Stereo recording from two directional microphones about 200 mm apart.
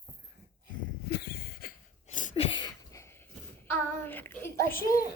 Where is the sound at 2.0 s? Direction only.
35° left (ahead or behind); by 3.1 s 20° left (ahead or behind).